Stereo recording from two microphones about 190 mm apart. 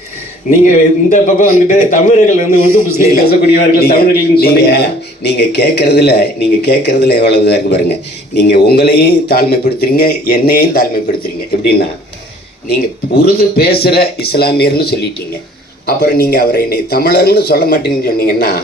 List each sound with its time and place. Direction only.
1.1 s a man's voice: 45° left (ahead or behind)
13.2 s a man's voice: 55° left (ahead or behind)
16.0 s a man's voice: 60° left (ahead or behind)